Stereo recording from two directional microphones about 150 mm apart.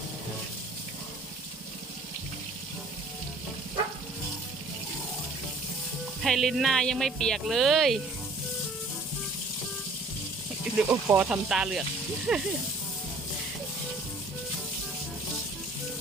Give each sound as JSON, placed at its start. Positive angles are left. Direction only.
{"t": 6.2, "sound": "speech", "side_deg": 0}
{"t": 10.8, "sound": "speech", "side_deg": -10}